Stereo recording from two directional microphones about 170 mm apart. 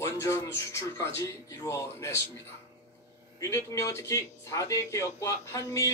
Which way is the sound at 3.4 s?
20° left (ahead or behind).